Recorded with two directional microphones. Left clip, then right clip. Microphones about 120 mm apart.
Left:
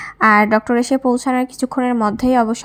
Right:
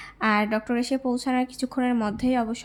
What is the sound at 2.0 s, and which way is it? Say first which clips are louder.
Speech: left 10 dB; 40° left (ahead or behind).